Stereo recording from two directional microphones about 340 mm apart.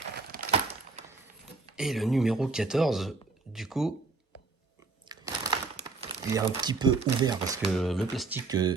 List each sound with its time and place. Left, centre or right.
0.2 s a sound: right
1.7 s speech: centre
5.0 s crumpling: centre
7.8 s speech: centre
8.4 s speech: centre